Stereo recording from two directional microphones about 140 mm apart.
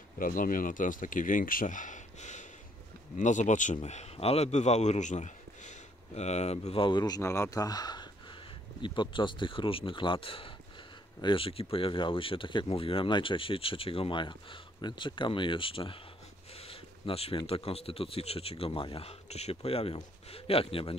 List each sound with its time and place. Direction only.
0.2 s a man's voice: 75° left (ahead or behind); by 16.0 s 40° left (ahead or behind)
16.6 s a sound: 45° left (ahead or behind)
17.5 s speech: 45° left (ahead or behind)